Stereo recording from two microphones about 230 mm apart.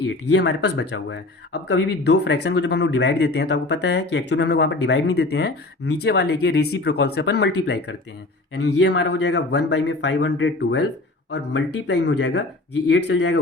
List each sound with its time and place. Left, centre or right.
0.3 s speech: left